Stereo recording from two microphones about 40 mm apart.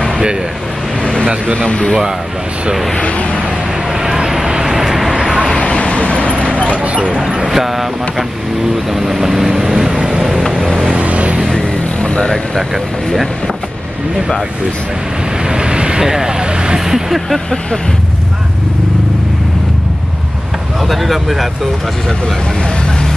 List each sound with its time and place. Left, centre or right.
1.6 s speech: left
3.0 s speech: left
4.0 s vehicle: centre
5.6 s vehicle: left
7.1 s vehicle: centre
11.0 s a sound: right
11.4 s vehicle: centre
12.5 s speech: centre
15.4 s vehicle: right
20.9 s speech: centre